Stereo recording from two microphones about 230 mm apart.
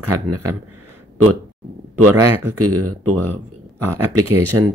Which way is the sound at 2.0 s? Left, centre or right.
Right.